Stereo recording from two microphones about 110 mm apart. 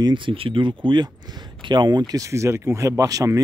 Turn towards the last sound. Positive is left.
turn(degrees=-30)  # may be behind; listen again after turning